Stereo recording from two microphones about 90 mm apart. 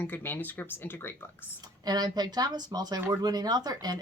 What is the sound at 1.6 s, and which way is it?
Speech, 50° right (ahead or behind).